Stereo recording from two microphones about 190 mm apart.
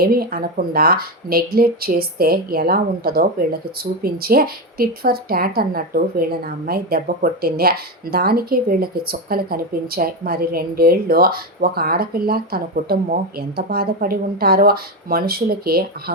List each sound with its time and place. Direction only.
0.0 s a woman's voice: 50° right (ahead or behind)